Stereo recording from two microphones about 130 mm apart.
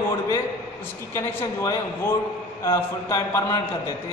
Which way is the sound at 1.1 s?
20° left (ahead or behind).